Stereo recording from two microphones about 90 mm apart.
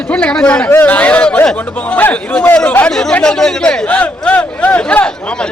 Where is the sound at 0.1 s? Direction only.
10° left (ahead or behind).